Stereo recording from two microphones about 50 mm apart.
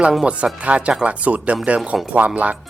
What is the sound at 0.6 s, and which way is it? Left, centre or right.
Speech, right.